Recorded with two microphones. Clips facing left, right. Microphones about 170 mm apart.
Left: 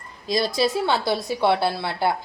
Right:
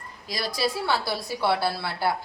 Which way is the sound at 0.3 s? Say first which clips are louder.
Left 6 dB; 25° left (ahead or behind).